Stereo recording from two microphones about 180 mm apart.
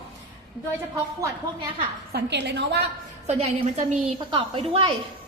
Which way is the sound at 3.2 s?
40° right (ahead or behind).